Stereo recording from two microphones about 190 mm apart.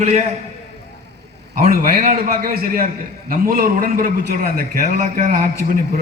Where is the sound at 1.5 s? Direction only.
50° right (ahead or behind).